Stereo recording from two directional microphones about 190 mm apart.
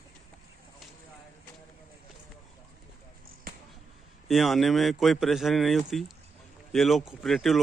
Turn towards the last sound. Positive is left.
turn(degrees=0)  # may be behind; listen again after turning